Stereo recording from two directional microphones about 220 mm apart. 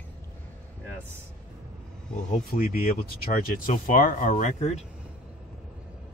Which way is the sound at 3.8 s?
35° left (ahead or behind).